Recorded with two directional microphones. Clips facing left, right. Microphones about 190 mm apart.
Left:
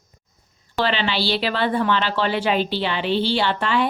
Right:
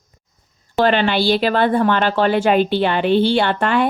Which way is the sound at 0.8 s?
50° right (ahead or behind).